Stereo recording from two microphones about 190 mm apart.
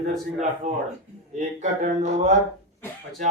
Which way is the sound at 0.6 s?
35° right (ahead or behind).